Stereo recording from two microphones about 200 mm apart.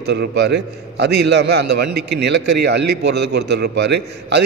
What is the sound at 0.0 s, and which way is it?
A man's voice, 55° right (ahead or behind).